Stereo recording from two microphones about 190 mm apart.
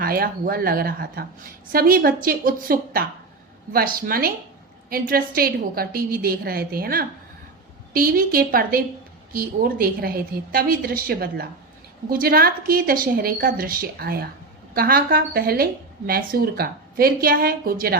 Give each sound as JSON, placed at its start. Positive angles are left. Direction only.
{"t": 0.0, "sound": "a woman's voice", "side_deg": -50}